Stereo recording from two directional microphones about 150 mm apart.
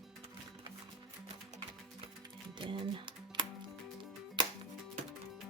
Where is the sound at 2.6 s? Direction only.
35° right (ahead or behind).